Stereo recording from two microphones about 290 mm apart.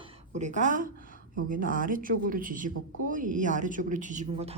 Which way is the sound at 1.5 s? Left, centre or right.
Right.